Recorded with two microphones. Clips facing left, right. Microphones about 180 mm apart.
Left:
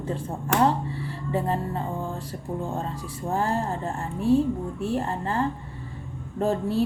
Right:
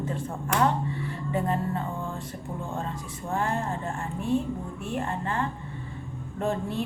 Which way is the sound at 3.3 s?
35° left (ahead or behind).